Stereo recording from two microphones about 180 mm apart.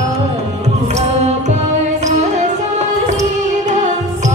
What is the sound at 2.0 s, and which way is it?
Music, 40° right (ahead or behind).